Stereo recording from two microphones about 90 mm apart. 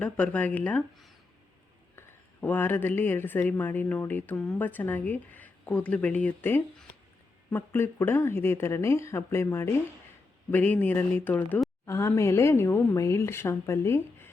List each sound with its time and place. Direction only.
0.0 s speech: 15° left (ahead or behind)
2.0 s a woman's voice: 20° left (ahead or behind)
10.5 s speech: 15° left (ahead or behind)
11.9 s a woman's voice: 35° left (ahead or behind)